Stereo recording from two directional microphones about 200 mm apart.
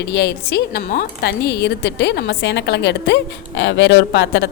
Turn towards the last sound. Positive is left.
turn(degrees=65)  # may be behind; listen again after turning